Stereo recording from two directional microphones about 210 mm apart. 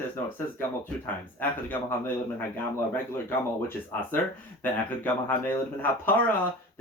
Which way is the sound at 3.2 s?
10° left (ahead or behind).